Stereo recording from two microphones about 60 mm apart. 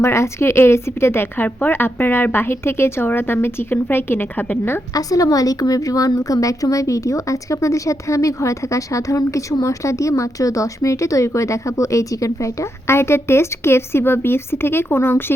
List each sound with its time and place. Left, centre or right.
0.0 s a woman's voice: left
4.9 s a woman's voice: left